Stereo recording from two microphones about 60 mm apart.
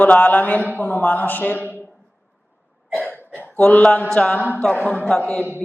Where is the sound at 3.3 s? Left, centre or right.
Left.